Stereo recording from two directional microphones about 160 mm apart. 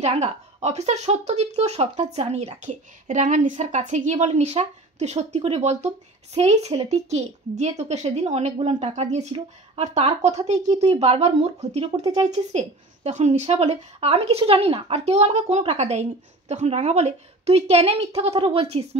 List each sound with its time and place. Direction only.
0.0 s a woman's voice: 40° right (ahead or behind)